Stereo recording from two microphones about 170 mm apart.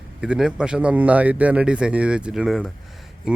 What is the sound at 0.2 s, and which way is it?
A man's voice, 5° right (ahead or behind).